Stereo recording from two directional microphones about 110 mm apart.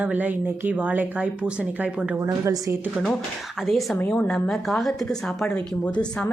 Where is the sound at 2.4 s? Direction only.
30° right (ahead or behind).